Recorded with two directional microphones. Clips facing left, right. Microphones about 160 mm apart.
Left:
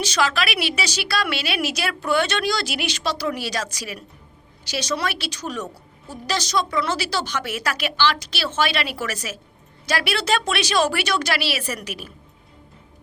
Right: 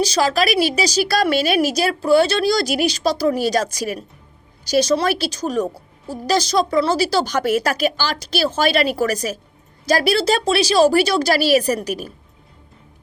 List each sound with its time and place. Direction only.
0.0 s a woman's voice: 35° right (ahead or behind)
4.9 s a woman's voice: 35° right (ahead or behind)